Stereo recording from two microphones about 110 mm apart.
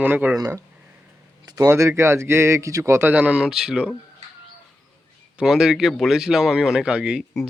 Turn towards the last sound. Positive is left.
turn(degrees=-10)  # may be behind; listen again after turning